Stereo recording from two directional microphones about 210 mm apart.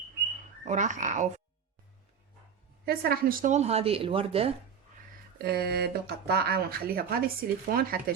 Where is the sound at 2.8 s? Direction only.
45° right (ahead or behind); by 4.5 s 25° right (ahead or behind).